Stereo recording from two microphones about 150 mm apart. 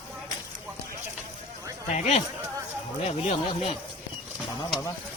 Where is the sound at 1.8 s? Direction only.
45° left (ahead or behind).